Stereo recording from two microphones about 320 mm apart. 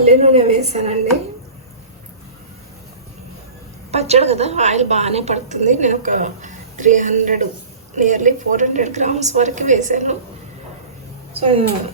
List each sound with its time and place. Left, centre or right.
0.0 s a woman's voice: centre
3.9 s a woman's voice: centre
11.3 s a woman's voice: centre